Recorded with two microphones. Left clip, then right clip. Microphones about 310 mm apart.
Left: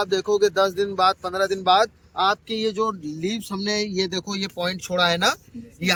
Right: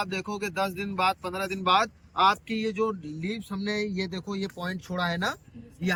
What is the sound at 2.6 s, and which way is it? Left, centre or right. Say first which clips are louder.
Speech: left 5 dB; left.